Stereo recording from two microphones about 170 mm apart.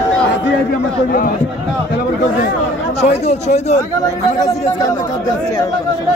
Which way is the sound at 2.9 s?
35° left (ahead or behind).